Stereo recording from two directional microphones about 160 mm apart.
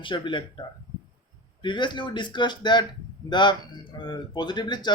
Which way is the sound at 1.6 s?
30° left (ahead or behind).